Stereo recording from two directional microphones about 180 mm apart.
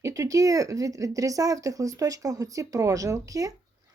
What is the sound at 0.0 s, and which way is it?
A woman's voice, 20° right (ahead or behind).